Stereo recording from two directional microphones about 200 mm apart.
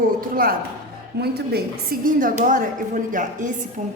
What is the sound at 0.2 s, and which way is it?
A woman's voice, 45° right (ahead or behind).